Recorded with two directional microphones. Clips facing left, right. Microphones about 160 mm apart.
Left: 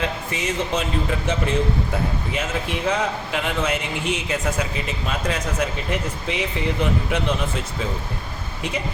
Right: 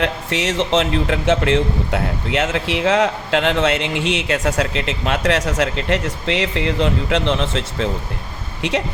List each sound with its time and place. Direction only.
0.0 s speech: 80° right